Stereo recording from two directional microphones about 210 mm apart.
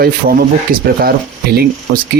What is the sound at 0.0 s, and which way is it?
Speech, 45° right (ahead or behind).